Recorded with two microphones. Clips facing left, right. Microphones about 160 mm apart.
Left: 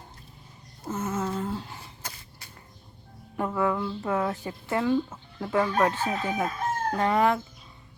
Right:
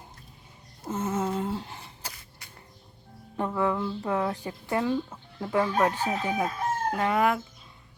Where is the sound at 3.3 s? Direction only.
20° right (ahead or behind).